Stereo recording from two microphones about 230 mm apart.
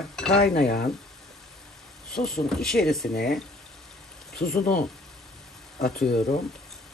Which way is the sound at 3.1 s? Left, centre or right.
Left.